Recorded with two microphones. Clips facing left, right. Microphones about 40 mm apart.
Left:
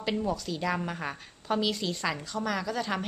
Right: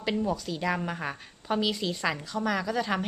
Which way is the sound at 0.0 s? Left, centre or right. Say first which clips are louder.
Right 1 dB; centre.